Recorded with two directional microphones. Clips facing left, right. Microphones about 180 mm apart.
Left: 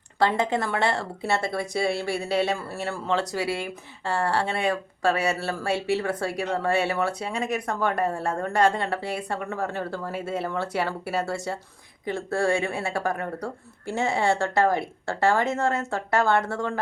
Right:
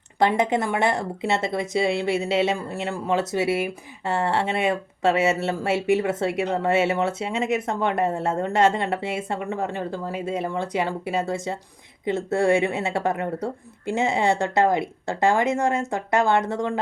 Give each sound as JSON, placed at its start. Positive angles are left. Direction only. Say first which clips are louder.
{"t": 0.2, "sound": "speech", "louder": "right 3 dB", "side_deg": -20}